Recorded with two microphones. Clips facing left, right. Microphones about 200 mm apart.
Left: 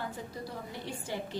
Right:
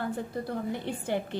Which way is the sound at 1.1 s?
60° right (ahead or behind).